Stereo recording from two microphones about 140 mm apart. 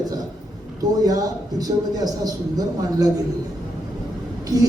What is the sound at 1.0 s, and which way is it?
A man's voice, 25° right (ahead or behind).